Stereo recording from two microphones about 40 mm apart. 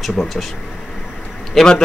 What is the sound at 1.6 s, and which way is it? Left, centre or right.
Speech, centre.